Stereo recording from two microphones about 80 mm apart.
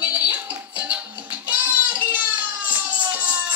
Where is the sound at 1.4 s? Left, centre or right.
Right.